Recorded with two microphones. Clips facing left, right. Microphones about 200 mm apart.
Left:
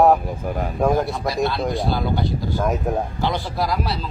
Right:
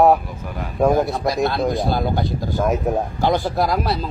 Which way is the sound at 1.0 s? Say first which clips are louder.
Right 2 dB; 45° right (ahead or behind).